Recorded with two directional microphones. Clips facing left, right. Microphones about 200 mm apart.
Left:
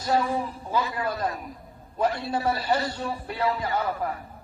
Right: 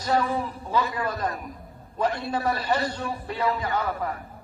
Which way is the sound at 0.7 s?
10° left (ahead or behind).